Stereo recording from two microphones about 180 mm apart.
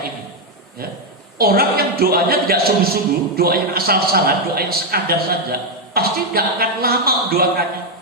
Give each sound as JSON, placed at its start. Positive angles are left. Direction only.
{"t": 1.4, "sound": "a man's voice", "side_deg": -55}